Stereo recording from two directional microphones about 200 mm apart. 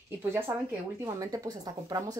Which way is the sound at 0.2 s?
10° right (ahead or behind).